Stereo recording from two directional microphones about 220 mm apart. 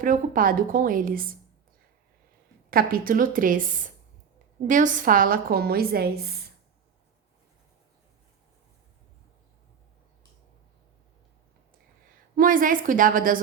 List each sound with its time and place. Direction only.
0.0 s a woman's voice: 40° right (ahead or behind)
2.6 s a woman's voice: 40° right (ahead or behind)
12.4 s a woman's voice: 40° right (ahead or behind)